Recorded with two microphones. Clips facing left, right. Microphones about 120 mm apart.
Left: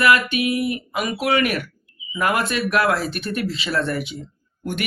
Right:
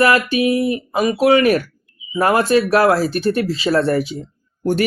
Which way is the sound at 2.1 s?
30° right (ahead or behind).